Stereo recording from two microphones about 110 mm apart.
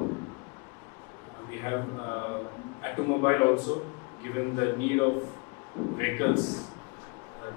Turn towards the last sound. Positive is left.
turn(degrees=25)  # may be behind; listen again after turning